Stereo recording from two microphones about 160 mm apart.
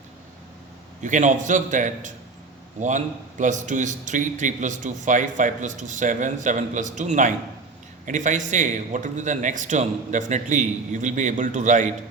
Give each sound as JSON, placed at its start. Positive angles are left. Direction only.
{"t": 1.0, "sound": "a man's voice", "side_deg": -50}